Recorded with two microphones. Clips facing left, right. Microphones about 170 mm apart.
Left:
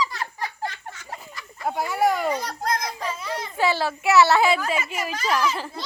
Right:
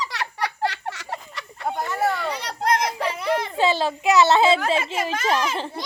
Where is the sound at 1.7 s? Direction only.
10° left (ahead or behind).